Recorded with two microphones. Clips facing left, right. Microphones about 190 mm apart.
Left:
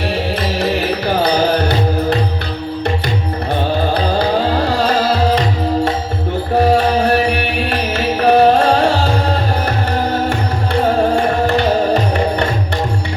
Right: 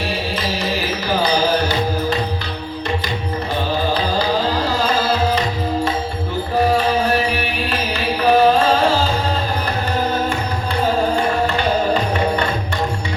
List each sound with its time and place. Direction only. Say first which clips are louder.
0.6 s music: left 5 dB; 65° left (ahead or behind)
3.9 s music: left 3 dB; 60° left (ahead or behind)
6.7 s music: left 4 dB; 65° left (ahead or behind)